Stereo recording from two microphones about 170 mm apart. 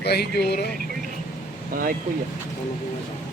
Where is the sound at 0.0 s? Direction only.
70° left (ahead or behind).